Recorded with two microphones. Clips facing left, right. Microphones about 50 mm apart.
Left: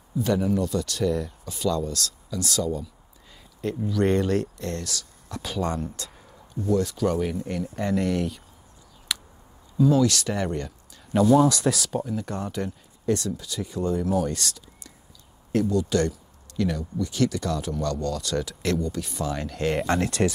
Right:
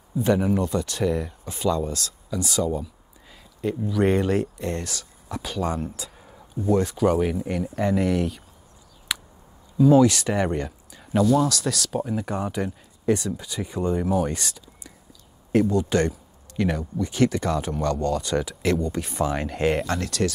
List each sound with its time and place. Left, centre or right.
0.2 s speech: right
5.3 s speech: centre
6.7 s speech: right; by 8.4 s centre
9.1 s a sound: centre
9.8 s speech: right
11.4 s speech: centre
12.0 s speech: centre
15.6 s speech: right; by 18.8 s centre
18.8 s speech: right
19.9 s speech: left